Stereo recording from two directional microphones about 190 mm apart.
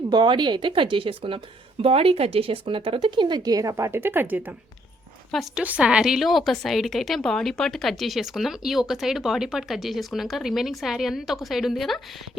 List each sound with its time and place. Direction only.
0.1 s a woman's voice: 25° right (ahead or behind); by 11.9 s centre (ahead or behind)